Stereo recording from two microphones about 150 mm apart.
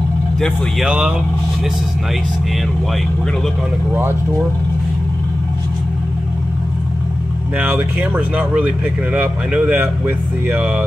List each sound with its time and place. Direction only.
0.4 s speech: 5° right (ahead or behind)
7.5 s speech: 10° right (ahead or behind)